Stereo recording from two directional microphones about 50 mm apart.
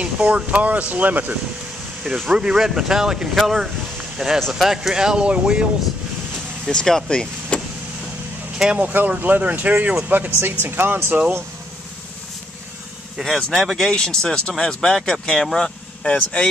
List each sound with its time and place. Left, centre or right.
0.0 s speech: right
2.0 s speech: centre
6.7 s speech: centre
7.1 s vehicle: centre
8.7 s speech: right
10.4 s speech: right
11.1 s speech: right
13.2 s speech: centre
15.5 s vehicle: centre
16.1 s speech: left